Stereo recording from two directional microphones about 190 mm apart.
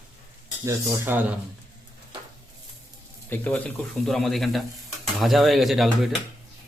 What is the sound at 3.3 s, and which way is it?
Speech, 10° left (ahead or behind).